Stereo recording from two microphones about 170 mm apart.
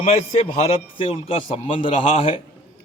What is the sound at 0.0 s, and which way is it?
A man's voice, 40° left (ahead or behind).